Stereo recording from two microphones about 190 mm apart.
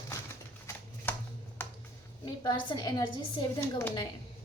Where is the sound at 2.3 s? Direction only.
25° left (ahead or behind).